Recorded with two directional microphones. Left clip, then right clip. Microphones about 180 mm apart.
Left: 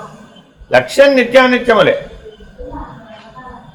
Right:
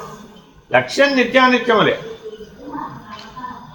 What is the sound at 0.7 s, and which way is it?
Speech, 55° left (ahead or behind).